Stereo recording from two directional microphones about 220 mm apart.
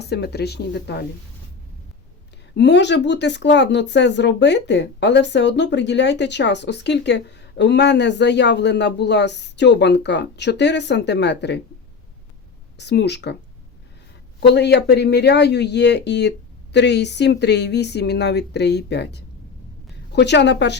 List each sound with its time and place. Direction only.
0.0 s speech: 50° left (ahead or behind)
2.6 s speech: 50° left (ahead or behind)
12.7 s speech: 50° left (ahead or behind)
14.5 s speech: 50° left (ahead or behind)